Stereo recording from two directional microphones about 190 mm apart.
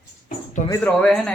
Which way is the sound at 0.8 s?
5° left (ahead or behind).